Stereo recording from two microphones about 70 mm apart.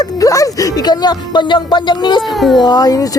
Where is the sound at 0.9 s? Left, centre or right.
Left.